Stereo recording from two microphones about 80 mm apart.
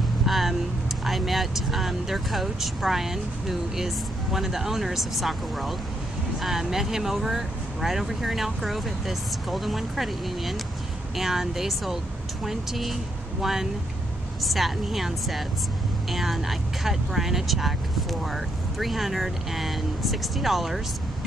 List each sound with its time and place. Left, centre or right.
0.3 s vehicle: centre
1.0 s speech: centre